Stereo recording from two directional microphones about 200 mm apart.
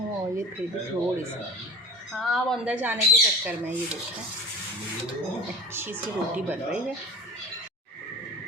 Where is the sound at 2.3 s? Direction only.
5° right (ahead or behind).